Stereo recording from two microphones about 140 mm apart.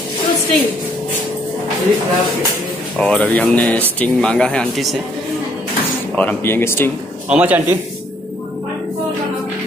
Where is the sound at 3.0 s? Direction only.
10° left (ahead or behind).